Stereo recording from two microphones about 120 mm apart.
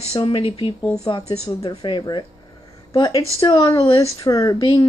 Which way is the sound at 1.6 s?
35° left (ahead or behind).